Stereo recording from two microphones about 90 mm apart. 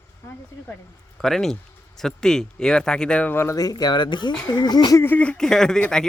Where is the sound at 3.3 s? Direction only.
30° left (ahead or behind).